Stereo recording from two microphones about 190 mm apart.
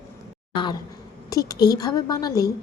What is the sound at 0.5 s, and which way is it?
A woman's voice, 25° left (ahead or behind).